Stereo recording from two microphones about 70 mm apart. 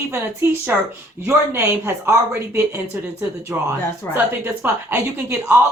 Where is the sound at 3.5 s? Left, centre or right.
Right.